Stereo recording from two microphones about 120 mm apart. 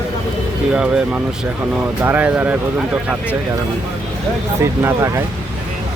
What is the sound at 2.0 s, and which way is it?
Speech, 15° right (ahead or behind).